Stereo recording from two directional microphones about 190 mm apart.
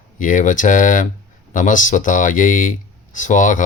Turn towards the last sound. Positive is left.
turn(degrees=40)  # may be behind; listen again after turning